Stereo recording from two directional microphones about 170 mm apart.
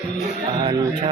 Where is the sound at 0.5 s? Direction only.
25° right (ahead or behind).